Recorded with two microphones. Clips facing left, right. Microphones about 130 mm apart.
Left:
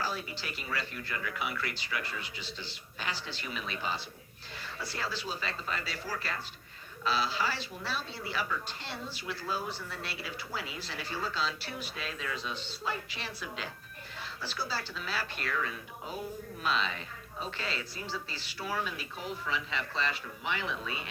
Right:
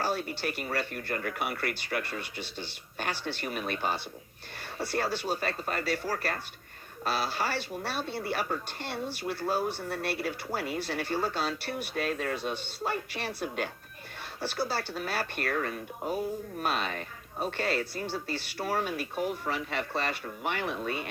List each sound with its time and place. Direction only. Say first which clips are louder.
0.0 s speech: right 6 dB; 60° right (ahead or behind)